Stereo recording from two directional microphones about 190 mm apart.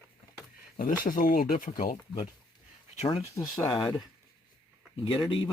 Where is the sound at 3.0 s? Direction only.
30° left (ahead or behind).